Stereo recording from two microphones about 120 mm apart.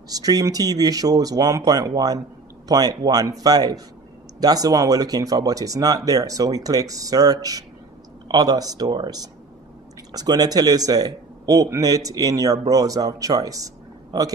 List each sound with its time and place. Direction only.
0.1 s speech: 30° right (ahead or behind)